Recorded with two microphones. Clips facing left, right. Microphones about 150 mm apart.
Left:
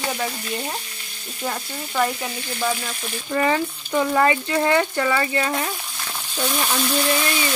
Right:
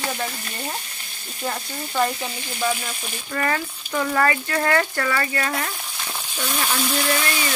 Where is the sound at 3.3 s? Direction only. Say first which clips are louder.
Left 4 dB; 15° left (ahead or behind).